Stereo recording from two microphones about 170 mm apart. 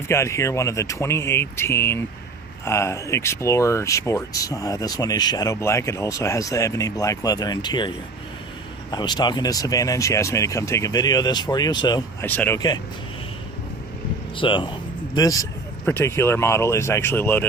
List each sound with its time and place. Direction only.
0.1 s speech: 15° left (ahead or behind)
8.9 s speech: 25° left (ahead or behind)
12.2 s speech: 10° left (ahead or behind)
12.5 s speech: 25° left (ahead or behind)
14.3 s speech: 30° left (ahead or behind); by 17.4 s 15° left (ahead or behind)